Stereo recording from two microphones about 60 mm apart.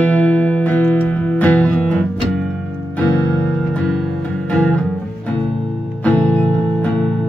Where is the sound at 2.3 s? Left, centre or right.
Centre.